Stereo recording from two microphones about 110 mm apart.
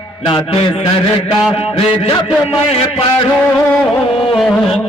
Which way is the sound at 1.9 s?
60° left (ahead or behind).